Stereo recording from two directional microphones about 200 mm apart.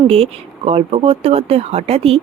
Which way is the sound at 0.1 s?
30° right (ahead or behind).